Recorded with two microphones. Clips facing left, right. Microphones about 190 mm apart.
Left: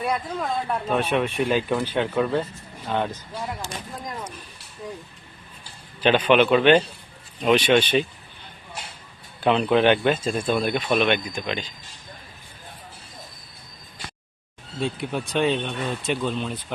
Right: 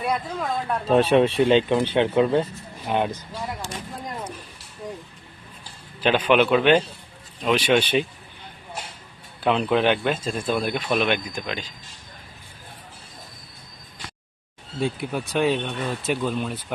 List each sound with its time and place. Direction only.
0.0 s speech: centre (ahead or behind)
0.9 s speech: 30° right (ahead or behind)
6.0 s speech: 5° right (ahead or behind)
9.4 s speech: centre (ahead or behind)
14.8 s speech: centre (ahead or behind)